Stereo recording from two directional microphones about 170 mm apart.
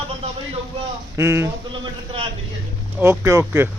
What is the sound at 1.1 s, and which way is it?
Speech, 15° right (ahead or behind).